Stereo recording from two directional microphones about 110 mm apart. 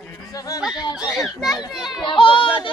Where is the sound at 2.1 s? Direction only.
50° left (ahead or behind).